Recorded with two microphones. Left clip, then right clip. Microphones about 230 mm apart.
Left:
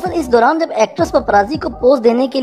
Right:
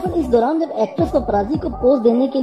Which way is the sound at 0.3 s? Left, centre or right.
Left.